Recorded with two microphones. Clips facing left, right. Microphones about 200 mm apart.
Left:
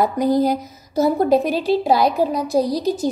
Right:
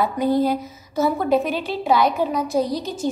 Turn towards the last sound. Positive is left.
turn(degrees=35)  # may be behind; listen again after turning